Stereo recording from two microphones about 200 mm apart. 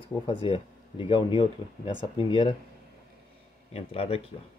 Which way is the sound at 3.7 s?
30° left (ahead or behind).